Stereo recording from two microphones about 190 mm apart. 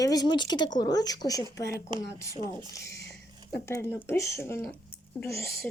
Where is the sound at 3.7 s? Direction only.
15° left (ahead or behind).